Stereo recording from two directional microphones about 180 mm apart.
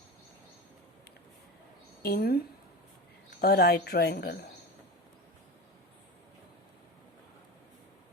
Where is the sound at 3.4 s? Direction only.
60° left (ahead or behind).